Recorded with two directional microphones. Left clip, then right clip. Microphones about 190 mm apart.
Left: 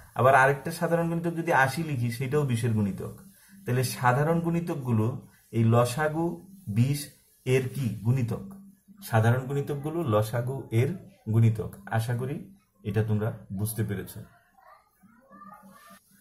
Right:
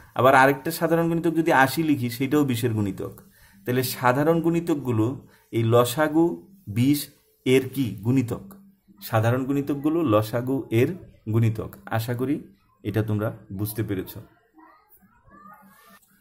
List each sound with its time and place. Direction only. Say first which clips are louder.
0.1 s speech: right 4 dB; 50° right (ahead or behind)